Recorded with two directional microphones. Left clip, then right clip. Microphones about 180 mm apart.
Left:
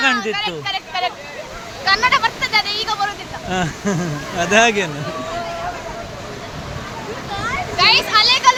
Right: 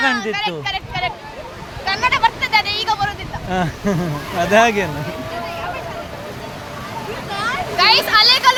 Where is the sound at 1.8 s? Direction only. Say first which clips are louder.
Left 1 dB; 30° left (ahead or behind).